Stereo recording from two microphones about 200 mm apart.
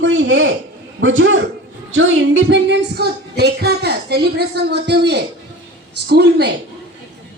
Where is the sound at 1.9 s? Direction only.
75° right (ahead or behind); by 6.5 s 55° right (ahead or behind).